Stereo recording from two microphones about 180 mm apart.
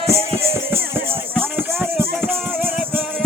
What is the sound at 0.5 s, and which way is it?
Music, 10° right (ahead or behind).